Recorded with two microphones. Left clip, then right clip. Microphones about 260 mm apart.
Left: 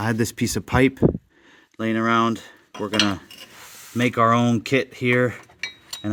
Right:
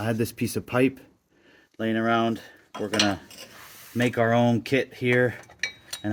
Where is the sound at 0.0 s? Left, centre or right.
Left.